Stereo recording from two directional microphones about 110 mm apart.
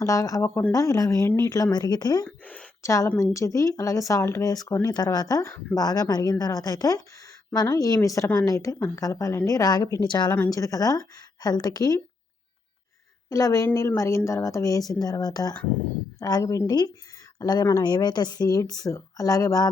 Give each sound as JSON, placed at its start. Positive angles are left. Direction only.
{"t": 0.0, "sound": "speech", "side_deg": 30}
{"t": 2.2, "sound": "speech", "side_deg": 15}
{"t": 2.8, "sound": "speech", "side_deg": 30}
{"t": 13.3, "sound": "speech", "side_deg": 30}